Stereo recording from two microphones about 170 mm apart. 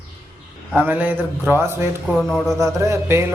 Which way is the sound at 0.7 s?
10° right (ahead or behind).